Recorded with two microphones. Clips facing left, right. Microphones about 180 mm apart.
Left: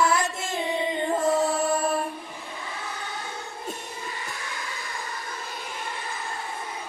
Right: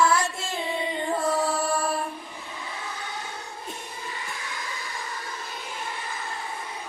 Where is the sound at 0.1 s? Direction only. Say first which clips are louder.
Even; 20° left (ahead or behind).